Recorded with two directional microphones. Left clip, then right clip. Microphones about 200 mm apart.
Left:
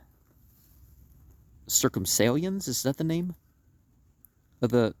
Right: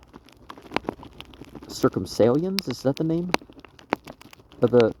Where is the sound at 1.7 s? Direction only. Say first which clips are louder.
Right 2 dB; 85° left.